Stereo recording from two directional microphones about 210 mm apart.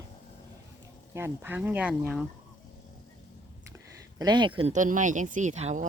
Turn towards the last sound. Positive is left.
turn(degrees=-35)  # may be behind; listen again after turning